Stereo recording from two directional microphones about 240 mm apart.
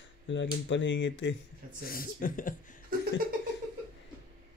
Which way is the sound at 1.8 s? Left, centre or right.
Left.